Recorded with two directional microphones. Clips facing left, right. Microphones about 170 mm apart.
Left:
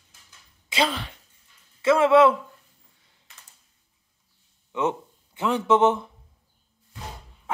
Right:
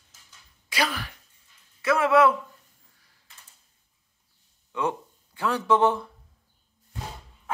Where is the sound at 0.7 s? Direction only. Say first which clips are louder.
Left 3 dB; 25° left (ahead or behind).